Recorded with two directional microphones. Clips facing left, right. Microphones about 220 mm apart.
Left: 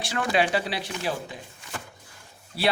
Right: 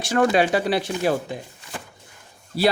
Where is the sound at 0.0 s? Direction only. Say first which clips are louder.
Right 6 dB; 45° right (ahead or behind).